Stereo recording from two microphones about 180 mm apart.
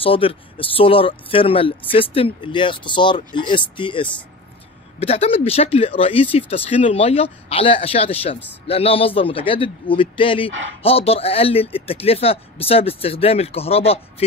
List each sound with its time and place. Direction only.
0.0 s speech: 30° left (ahead or behind)